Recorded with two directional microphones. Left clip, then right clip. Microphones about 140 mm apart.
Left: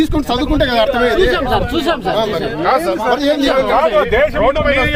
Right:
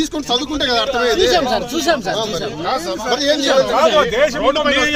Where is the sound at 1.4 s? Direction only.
65° right (ahead or behind).